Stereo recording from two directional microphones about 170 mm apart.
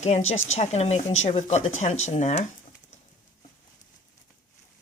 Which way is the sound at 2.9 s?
45° left (ahead or behind).